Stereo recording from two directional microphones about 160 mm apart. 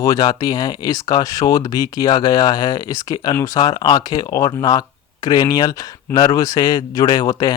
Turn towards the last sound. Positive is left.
turn(degrees=25)  # may be behind; listen again after turning